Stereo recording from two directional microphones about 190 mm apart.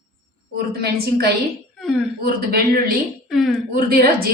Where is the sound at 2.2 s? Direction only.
55° right (ahead or behind).